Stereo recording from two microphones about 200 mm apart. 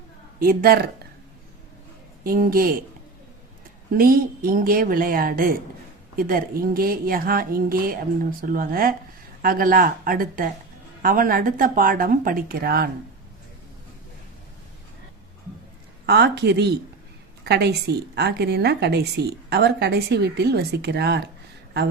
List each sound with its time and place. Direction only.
0.3 s a woman's voice: 50° right (ahead or behind)
2.2 s a woman's voice: 45° right (ahead or behind)
3.9 s a woman's voice: 45° right (ahead or behind)
16.0 s a woman's voice: 55° right (ahead or behind)